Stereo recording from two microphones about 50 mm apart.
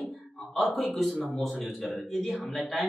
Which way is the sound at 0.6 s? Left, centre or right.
Centre.